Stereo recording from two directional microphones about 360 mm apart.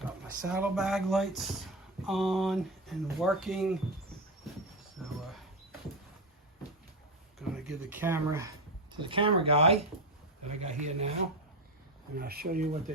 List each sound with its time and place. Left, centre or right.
0.4 s speech: centre
5.0 s a sound: centre
7.3 s speech: centre
12.1 s speech: right